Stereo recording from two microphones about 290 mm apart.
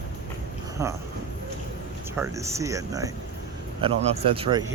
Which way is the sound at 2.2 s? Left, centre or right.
Centre.